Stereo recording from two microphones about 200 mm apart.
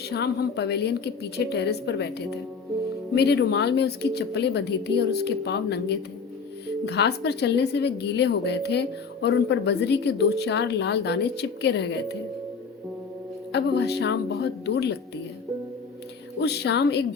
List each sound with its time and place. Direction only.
0.0 s a woman's voice: 55° left (ahead or behind)
13.5 s a woman's voice: 60° left (ahead or behind)
16.4 s a woman's voice: 55° left (ahead or behind)